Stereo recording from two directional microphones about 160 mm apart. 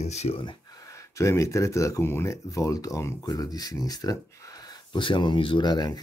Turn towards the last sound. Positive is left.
turn(degrees=25)  # may be behind; listen again after turning